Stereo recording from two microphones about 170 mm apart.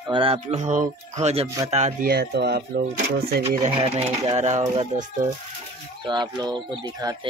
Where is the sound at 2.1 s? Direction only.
70° right (ahead or behind).